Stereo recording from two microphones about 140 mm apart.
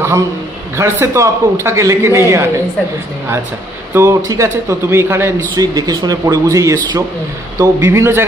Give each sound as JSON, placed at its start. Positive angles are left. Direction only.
{"t": 0.7, "sound": "a man's voice", "side_deg": -20}
{"t": 3.9, "sound": "a man's voice", "side_deg": -20}